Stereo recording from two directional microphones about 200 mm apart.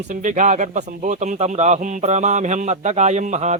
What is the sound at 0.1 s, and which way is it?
Speech, 40° right (ahead or behind).